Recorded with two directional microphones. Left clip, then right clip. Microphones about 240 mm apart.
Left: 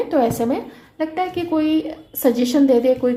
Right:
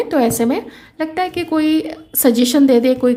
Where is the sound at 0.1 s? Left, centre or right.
Right.